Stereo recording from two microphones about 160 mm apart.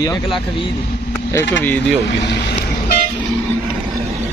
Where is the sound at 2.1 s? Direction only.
90° left.